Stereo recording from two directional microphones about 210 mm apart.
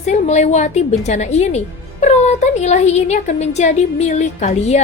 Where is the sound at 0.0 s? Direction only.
35° left (ahead or behind).